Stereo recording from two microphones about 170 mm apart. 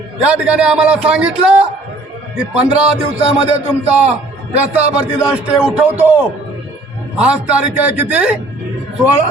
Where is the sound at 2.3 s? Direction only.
5° right (ahead or behind).